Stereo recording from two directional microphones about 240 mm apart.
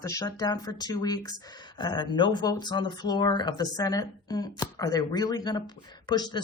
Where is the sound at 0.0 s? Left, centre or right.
Centre.